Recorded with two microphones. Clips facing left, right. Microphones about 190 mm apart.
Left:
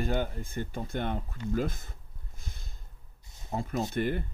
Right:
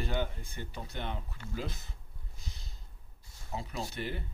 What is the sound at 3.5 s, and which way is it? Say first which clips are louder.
Speech: left 8 dB; 50° left (ahead or behind).